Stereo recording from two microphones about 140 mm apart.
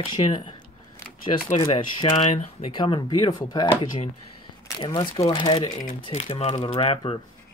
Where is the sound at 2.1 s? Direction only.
45° left (ahead or behind).